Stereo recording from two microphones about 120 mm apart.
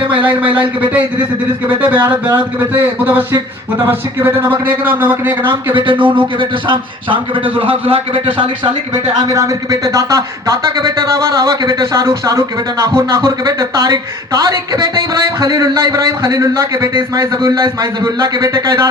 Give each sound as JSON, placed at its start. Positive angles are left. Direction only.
{"t": 0.2, "sound": "speech", "side_deg": -15}
{"t": 2.3, "sound": "speech", "side_deg": -15}
{"t": 5.7, "sound": "a man's voice", "side_deg": -45}
{"t": 9.3, "sound": "a man's voice", "side_deg": -30}
{"t": 11.6, "sound": "a man's voice", "side_deg": -30}